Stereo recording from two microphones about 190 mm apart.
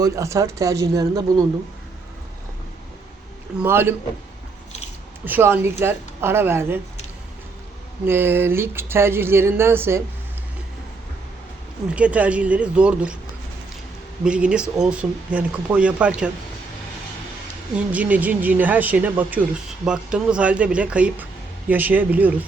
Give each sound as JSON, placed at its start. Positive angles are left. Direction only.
{"t": 0.0, "sound": "speech", "side_deg": -15}
{"t": 3.6, "sound": "speech", "side_deg": -10}
{"t": 5.2, "sound": "speech", "side_deg": -10}
{"t": 8.0, "sound": "speech", "side_deg": -10}
{"t": 11.9, "sound": "speech", "side_deg": -5}
{"t": 14.3, "sound": "speech", "side_deg": -5}
{"t": 17.7, "sound": "speech", "side_deg": -5}